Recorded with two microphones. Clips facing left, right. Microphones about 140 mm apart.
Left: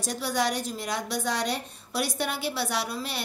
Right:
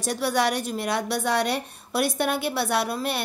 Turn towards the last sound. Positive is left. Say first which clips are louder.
# right 6 dB
turn(degrees=-55)  # may be behind; listen again after turning